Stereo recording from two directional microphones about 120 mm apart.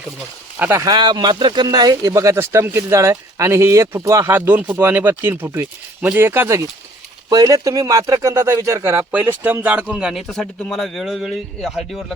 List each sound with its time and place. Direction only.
0.6 s speech: 20° right (ahead or behind)
0.9 s speech: 35° right (ahead or behind); by 12.1 s centre (ahead or behind)